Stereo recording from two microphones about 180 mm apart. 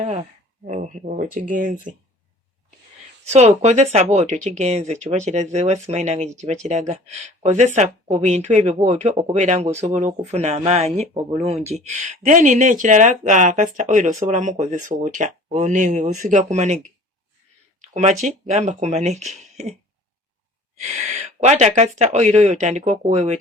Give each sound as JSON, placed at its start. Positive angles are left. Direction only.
{"t": 0.6, "sound": "speech", "side_deg": -45}
{"t": 3.2, "sound": "speech", "side_deg": -40}
{"t": 17.7, "sound": "a sound", "side_deg": -40}
{"t": 18.3, "sound": "speech", "side_deg": -40}
{"t": 20.7, "sound": "speech", "side_deg": -40}